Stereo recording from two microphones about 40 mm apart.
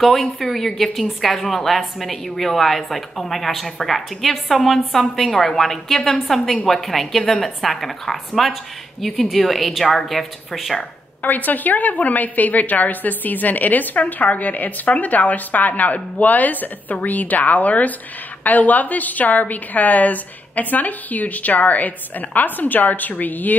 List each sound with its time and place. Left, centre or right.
0.0 s a woman's voice: centre
11.2 s a woman's voice: left